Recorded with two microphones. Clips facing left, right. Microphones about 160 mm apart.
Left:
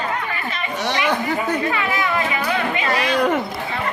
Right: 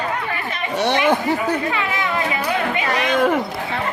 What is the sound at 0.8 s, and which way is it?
Speech, 55° right (ahead or behind).